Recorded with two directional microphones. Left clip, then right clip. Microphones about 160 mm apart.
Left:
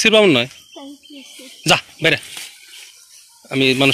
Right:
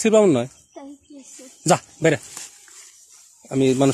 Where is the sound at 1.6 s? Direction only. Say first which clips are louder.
Left 3 dB; 15° right (ahead or behind).